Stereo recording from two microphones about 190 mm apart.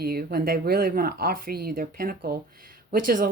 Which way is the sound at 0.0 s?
55° right (ahead or behind).